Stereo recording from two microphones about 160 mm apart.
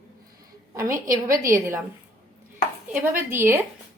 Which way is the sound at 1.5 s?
15° right (ahead or behind).